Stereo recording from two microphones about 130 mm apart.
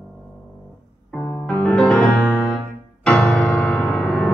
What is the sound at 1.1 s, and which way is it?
Music, 15° left (ahead or behind).